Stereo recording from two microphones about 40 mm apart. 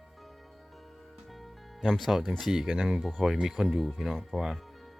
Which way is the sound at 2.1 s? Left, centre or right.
Centre.